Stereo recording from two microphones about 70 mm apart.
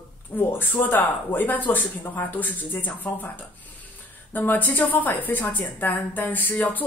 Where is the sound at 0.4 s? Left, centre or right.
Left.